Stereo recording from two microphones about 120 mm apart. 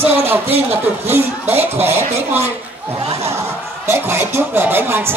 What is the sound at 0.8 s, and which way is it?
A man's voice, 15° right (ahead or behind).